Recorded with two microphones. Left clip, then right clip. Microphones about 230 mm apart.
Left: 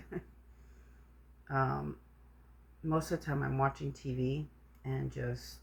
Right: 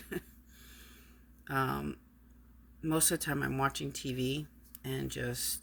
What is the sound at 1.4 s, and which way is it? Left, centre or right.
Speech, right.